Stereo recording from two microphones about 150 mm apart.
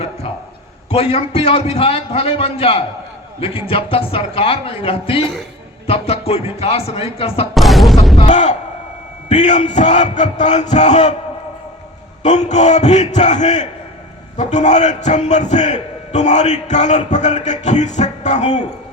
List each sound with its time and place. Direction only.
0.9 s a man's voice: 40° left (ahead or behind)
7.5 s boom: centre (ahead or behind)
8.3 s a man's voice: 55° left (ahead or behind)
12.2 s a man's voice: 50° left (ahead or behind)